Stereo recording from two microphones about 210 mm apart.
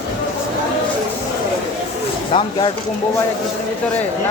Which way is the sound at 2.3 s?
25° left (ahead or behind).